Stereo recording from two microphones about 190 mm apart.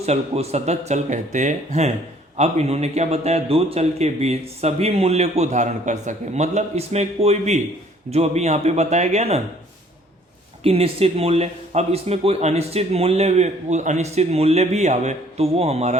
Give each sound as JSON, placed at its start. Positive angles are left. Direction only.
{"t": 0.0, "sound": "speech", "side_deg": -35}
{"t": 10.6, "sound": "speech", "side_deg": -30}